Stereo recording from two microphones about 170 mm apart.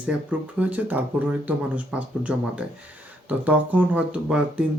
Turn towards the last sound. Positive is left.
turn(degrees=-5)  # may be behind; listen again after turning